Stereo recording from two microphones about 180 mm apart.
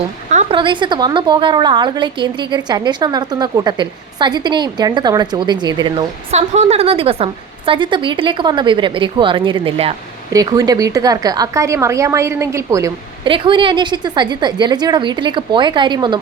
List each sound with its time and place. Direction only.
0.3 s a sound: 40° right (ahead or behind)
0.5 s a woman's voice: 25° right (ahead or behind)
6.3 s a woman's voice: 35° right (ahead or behind)
10.3 s a woman's voice: 20° right (ahead or behind)
13.3 s a woman's voice: 30° right (ahead or behind)